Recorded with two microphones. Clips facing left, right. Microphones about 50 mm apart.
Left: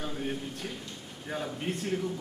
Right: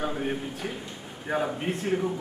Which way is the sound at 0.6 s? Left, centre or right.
Right.